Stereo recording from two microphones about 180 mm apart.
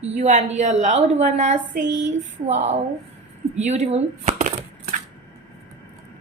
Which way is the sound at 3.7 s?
40° right (ahead or behind).